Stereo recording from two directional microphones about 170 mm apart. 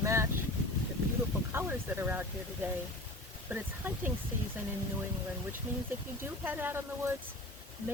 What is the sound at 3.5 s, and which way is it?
Speech, 10° right (ahead or behind).